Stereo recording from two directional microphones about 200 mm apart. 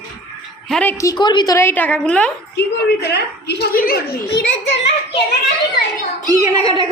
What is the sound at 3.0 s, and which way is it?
A child's voice, 55° left (ahead or behind).